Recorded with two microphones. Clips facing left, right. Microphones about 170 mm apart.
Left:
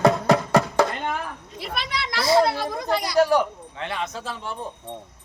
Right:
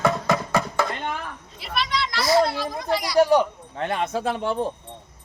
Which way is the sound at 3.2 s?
15° right (ahead or behind).